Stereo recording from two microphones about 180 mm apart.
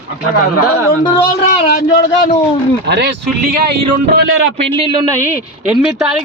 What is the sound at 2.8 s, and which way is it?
Speech, 70° right (ahead or behind).